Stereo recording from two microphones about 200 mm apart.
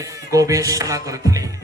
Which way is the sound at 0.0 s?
15° right (ahead or behind).